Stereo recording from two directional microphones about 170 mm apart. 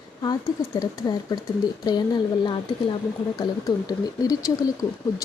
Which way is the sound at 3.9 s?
20° left (ahead or behind).